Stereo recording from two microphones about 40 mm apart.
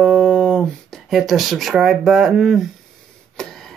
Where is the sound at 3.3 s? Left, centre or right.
Centre.